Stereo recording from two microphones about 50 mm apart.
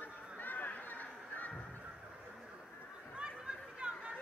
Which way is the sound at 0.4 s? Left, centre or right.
Left.